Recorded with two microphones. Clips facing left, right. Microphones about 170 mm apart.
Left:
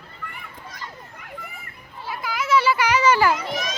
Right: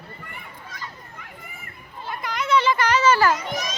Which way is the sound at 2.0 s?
5° left (ahead or behind).